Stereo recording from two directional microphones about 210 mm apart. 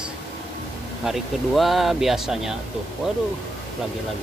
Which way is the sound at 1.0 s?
Centre (ahead or behind).